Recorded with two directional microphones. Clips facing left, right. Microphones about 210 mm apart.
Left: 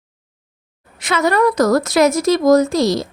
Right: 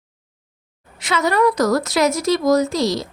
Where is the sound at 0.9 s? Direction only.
55° left (ahead or behind).